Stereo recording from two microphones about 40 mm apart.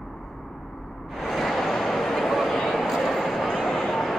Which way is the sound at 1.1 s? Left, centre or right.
Centre.